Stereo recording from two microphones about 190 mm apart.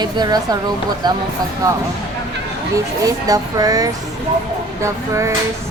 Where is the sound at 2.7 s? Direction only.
20° right (ahead or behind).